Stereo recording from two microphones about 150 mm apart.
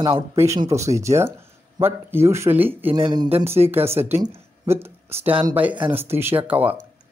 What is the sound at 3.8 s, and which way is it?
Speech, 45° right (ahead or behind).